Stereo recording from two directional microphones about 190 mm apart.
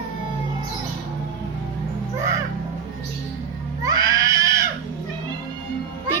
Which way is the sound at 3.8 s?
20° right (ahead or behind).